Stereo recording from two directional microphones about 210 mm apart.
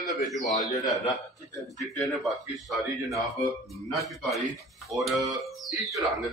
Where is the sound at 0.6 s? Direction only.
20° left (ahead or behind).